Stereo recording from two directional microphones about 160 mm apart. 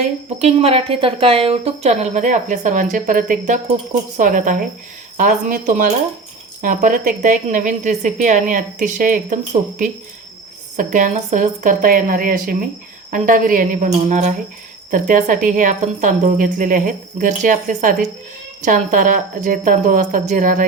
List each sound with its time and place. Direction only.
0.3 s a woman's voice: 40° right (ahead or behind)